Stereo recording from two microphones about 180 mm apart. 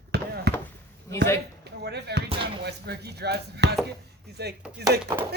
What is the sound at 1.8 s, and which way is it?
Speech, 65° right (ahead or behind).